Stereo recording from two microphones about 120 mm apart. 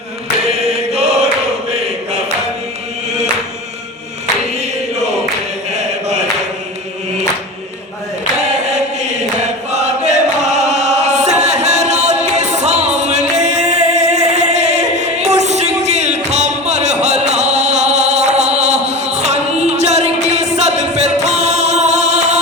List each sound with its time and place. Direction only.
0.4 s chant: 60° right (ahead or behind)
5.7 s chant: 70° right (ahead or behind)
9.4 s chant: 75° right (ahead or behind)